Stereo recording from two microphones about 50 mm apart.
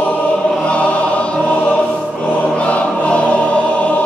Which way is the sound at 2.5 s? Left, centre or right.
Left.